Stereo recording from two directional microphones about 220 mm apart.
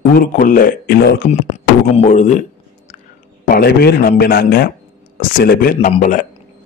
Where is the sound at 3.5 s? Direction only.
45° left (ahead or behind).